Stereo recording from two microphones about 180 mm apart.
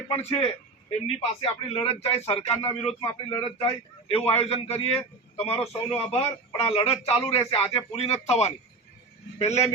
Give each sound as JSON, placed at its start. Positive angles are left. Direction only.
{"t": 0.1, "sound": "a man's voice", "side_deg": 35}